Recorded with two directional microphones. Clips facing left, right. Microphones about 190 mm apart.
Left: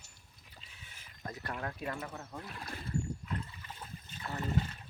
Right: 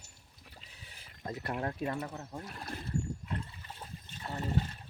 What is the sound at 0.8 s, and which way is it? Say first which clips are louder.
Speech: right 3 dB; 35° right (ahead or behind).